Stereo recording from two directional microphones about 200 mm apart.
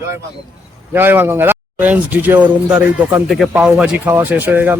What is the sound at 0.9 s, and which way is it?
Music, 10° right (ahead or behind).